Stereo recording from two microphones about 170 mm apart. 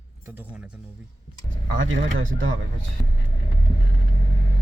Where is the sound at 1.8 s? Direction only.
90° right.